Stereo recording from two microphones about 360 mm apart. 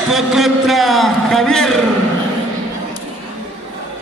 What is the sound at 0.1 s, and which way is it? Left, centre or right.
A man's voice, centre.